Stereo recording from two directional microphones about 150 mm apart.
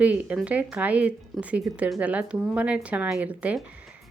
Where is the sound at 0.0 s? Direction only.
10° right (ahead or behind).